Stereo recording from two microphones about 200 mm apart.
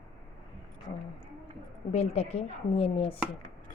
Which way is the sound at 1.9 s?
30° left (ahead or behind).